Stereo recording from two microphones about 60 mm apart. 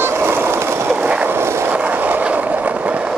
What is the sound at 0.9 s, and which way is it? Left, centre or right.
Skateboard, right.